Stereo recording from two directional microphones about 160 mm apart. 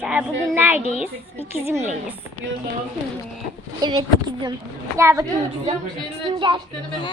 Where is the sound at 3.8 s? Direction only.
30° right (ahead or behind).